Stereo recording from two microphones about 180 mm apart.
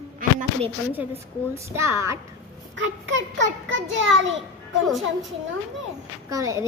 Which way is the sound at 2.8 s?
90° right.